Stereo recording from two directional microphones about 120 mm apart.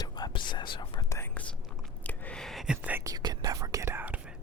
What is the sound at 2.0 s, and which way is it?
Whispering, 10° left (ahead or behind).